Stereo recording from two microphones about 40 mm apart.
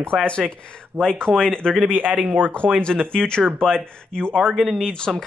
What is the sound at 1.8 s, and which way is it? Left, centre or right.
Speech, right.